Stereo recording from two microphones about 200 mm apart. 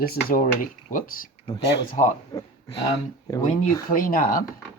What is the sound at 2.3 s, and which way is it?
Speech, 20° left (ahead or behind).